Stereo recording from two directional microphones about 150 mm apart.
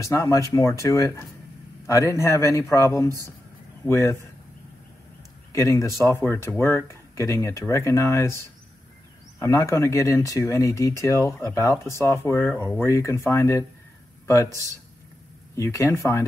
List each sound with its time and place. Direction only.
0.0 s a man's voice: 20° left (ahead or behind)
5.5 s speech: 20° left (ahead or behind)
9.4 s speech: 20° left (ahead or behind)
15.5 s speech: 20° left (ahead or behind)